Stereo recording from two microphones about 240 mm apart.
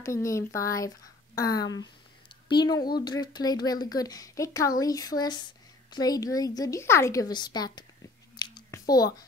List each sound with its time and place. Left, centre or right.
0.0 s speech: centre
8.4 s chewing: centre